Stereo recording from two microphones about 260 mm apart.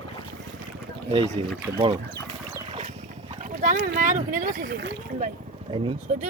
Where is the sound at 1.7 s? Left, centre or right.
Centre.